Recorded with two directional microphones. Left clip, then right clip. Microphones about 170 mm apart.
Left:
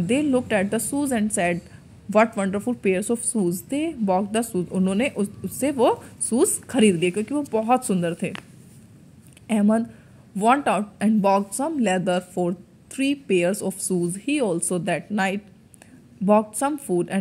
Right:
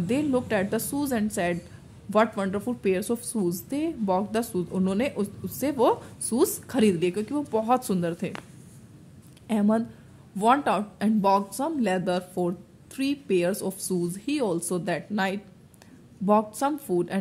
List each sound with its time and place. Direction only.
0.1 s speech: 10° left (ahead or behind)
2.3 s speech: 5° left (ahead or behind)
9.5 s speech: 15° left (ahead or behind)